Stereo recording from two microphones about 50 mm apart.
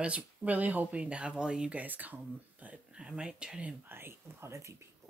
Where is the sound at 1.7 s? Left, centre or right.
Right.